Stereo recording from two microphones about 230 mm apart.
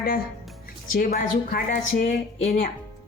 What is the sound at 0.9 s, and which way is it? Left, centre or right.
A woman's voice, left.